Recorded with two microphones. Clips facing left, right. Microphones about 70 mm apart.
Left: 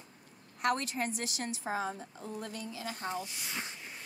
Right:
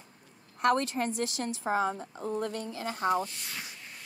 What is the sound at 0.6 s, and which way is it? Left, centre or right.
Speech, right.